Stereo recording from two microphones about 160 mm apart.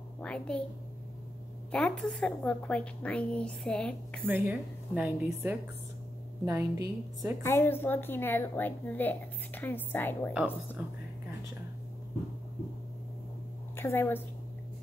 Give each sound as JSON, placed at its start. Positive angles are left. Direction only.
{"t": 0.2, "sound": "a woman's voice", "side_deg": 5}
{"t": 1.7, "sound": "a woman's voice", "side_deg": 5}
{"t": 4.2, "sound": "a woman's voice", "side_deg": -10}
{"t": 7.4, "sound": "a woman's voice", "side_deg": 15}
{"t": 10.3, "sound": "a woman's voice", "side_deg": -5}
{"t": 13.7, "sound": "a woman's voice", "side_deg": 15}